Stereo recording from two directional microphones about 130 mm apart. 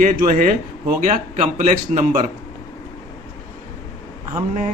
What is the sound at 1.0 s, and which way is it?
Speech, 65° right (ahead or behind).